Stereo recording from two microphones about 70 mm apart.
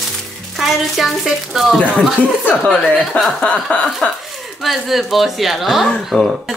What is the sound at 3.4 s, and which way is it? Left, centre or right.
Chuckle, centre.